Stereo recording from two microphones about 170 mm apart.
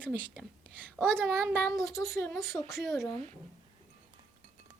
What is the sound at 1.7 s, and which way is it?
Speech, centre (ahead or behind).